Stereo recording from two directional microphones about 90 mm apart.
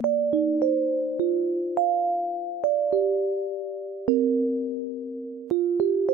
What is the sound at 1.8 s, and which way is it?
Music, 5° left (ahead or behind).